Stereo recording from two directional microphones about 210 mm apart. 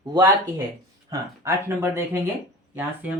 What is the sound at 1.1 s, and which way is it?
Speech, 10° right (ahead or behind).